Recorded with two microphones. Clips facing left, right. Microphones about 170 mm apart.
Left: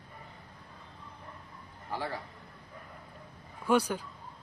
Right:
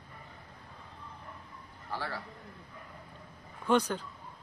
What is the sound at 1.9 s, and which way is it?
Speech, 15° left (ahead or behind).